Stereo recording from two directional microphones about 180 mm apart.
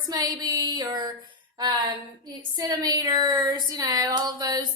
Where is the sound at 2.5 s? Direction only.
20° right (ahead or behind).